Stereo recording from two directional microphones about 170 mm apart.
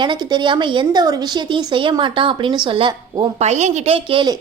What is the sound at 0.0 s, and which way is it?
A woman's voice, 25° right (ahead or behind).